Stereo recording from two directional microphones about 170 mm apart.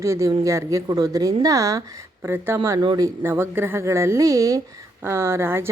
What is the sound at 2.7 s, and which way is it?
A woman's voice, 25° right (ahead or behind).